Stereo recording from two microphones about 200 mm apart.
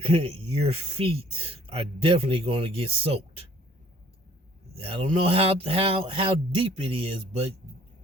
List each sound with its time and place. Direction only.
0.0 s speech: 30° right (ahead or behind)
4.7 s speech: 30° right (ahead or behind)